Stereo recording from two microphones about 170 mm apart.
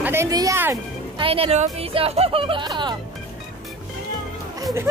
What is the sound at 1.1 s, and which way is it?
Speech, 30° right (ahead or behind).